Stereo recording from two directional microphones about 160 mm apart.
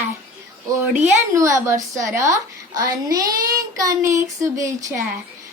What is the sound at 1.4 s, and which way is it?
A child's voice, 20° right (ahead or behind).